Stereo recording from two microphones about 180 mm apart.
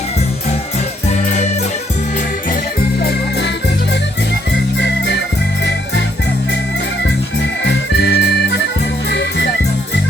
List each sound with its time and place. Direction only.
7.6 s music: 70° left (ahead or behind)